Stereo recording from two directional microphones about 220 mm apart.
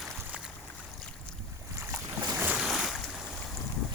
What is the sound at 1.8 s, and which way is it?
Boat, 10° right (ahead or behind).